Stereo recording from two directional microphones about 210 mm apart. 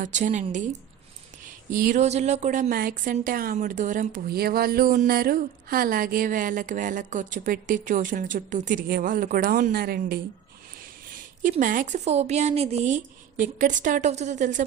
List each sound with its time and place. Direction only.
0.0 s a woman's voice: 35° right (ahead or behind)
1.7 s a woman's voice: 40° right (ahead or behind)
11.4 s a woman's voice: 40° right (ahead or behind)